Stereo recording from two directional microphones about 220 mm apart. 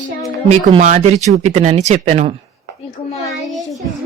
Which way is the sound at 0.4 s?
30° right (ahead or behind).